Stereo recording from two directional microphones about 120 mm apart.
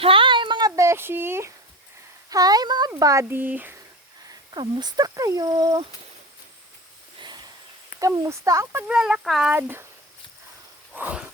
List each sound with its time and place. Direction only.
0.0 s a sound: 45° right (ahead or behind)
0.8 s speech: 20° right (ahead or behind)
2.3 s speech: 30° right (ahead or behind)
2.9 s speech: 25° right (ahead or behind)
4.5 s speech: 40° right (ahead or behind)
7.2 s a sound: 35° right (ahead or behind)
7.9 s speech: 25° right (ahead or behind)
8.9 s speech: 5° right (ahead or behind)
9.5 s speech: 20° right (ahead or behind)
10.9 s speech: 10° right (ahead or behind)